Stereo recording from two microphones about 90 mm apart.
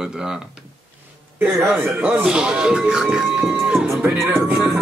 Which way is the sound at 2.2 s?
5° right (ahead or behind).